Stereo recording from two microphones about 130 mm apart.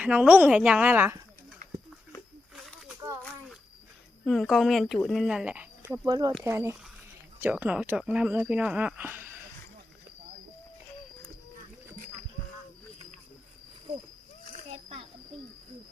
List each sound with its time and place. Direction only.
0.0 s speech: 10° right (ahead or behind)
2.6 s a sound: 5° right (ahead or behind)
4.3 s speech: centre (ahead or behind)
5.9 s speech: 30° right (ahead or behind)
6.4 s speech: 20° right (ahead or behind)
14.7 s a sound: 50° right (ahead or behind)